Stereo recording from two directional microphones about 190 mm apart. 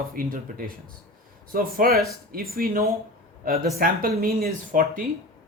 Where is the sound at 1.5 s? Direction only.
50° right (ahead or behind).